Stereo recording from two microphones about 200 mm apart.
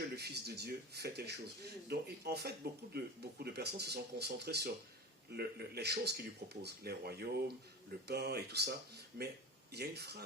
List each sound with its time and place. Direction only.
0.2 s speech: 55° right (ahead or behind)